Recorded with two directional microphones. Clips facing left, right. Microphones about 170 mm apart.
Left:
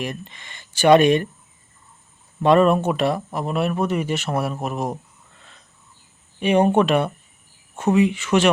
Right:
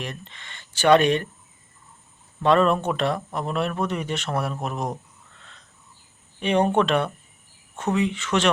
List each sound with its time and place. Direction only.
0.0 s speech: 10° left (ahead or behind)
2.4 s speech: 10° left (ahead or behind)
5.4 s a sound: 10° left (ahead or behind)
6.4 s speech: 10° left (ahead or behind)